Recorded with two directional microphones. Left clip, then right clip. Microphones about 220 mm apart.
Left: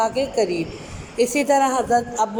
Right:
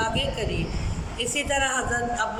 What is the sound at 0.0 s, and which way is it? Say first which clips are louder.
A woman's voice: left 6 dB; 25° left (ahead or behind).